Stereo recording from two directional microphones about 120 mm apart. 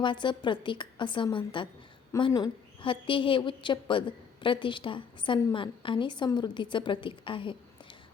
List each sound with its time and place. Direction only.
0.0 s a woman's voice: 40° left (ahead or behind)